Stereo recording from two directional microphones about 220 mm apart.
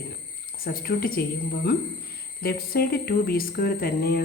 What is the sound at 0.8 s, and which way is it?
Speech, 40° left (ahead or behind).